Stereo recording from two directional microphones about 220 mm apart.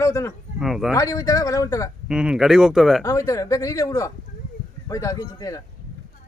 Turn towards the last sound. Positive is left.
turn(degrees=15)  # may be behind; listen again after turning